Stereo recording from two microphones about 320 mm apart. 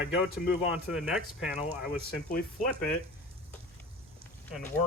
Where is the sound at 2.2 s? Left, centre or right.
Left.